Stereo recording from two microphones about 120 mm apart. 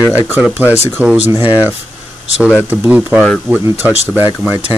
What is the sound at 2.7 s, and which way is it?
Speech, 15° right (ahead or behind).